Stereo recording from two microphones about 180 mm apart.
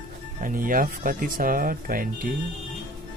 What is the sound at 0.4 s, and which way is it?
Speech, 50° right (ahead or behind).